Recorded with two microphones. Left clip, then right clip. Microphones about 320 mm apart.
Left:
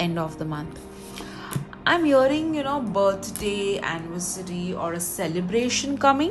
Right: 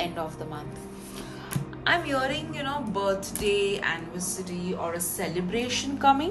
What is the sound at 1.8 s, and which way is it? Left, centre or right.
Speech, centre.